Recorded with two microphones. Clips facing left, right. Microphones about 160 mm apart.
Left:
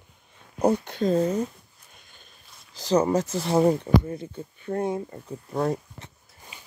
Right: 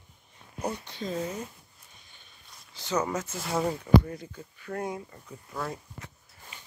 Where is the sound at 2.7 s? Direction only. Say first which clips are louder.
Left 8 dB; 35° left (ahead or behind).